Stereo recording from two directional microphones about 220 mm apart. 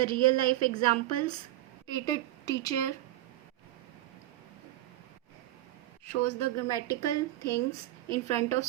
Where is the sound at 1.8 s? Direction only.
15° left (ahead or behind).